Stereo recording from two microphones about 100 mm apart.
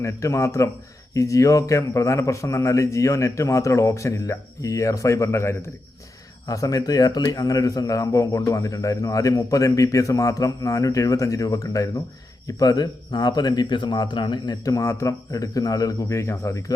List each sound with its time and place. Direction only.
0.0 s a man's voice: 30° left (ahead or behind)